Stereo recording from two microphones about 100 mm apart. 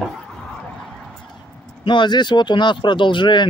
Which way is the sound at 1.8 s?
50° left (ahead or behind).